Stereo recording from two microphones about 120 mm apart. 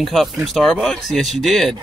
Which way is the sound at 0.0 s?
Centre (ahead or behind).